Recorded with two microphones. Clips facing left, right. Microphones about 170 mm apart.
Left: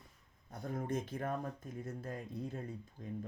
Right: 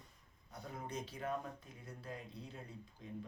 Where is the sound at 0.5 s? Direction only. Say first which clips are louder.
Left 7 dB; 50° left (ahead or behind).